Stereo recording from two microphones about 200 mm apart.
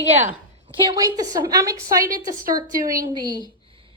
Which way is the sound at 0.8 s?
20° right (ahead or behind).